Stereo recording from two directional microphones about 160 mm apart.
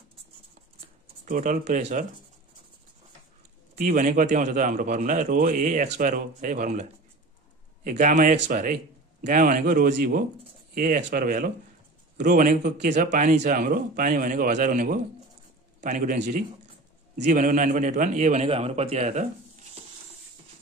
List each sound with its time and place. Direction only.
1.2 s a man's voice: 55° right (ahead or behind)
3.7 s speech: 65° right (ahead or behind)
4.0 s a man's voice: 50° right (ahead or behind)
17.2 s a man's voice: 50° right (ahead or behind)